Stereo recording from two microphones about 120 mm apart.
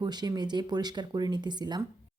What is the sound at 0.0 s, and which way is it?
Speech, 35° right (ahead or behind).